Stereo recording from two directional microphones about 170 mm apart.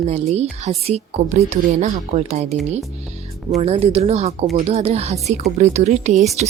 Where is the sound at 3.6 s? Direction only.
35° right (ahead or behind).